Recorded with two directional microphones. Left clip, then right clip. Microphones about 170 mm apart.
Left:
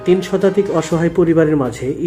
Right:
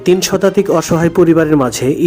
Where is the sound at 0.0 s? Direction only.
35° right (ahead or behind).